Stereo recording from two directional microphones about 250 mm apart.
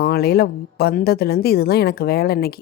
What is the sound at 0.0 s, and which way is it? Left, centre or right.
Speech, left.